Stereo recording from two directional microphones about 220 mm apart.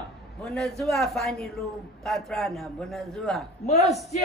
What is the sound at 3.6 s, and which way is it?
Speech, 30° left (ahead or behind).